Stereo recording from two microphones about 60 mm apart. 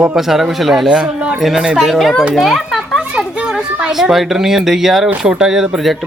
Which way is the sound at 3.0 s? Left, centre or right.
Centre.